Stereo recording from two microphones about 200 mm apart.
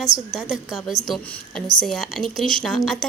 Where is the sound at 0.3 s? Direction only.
Centre (ahead or behind).